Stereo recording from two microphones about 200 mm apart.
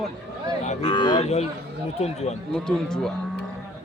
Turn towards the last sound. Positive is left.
turn(degrees=5)  # may be behind; listen again after turning